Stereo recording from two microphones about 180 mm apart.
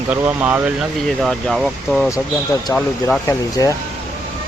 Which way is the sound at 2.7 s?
15° left (ahead or behind).